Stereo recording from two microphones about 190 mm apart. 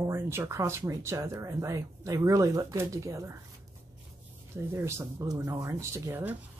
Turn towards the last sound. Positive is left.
turn(degrees=-10)  # may be behind; listen again after turning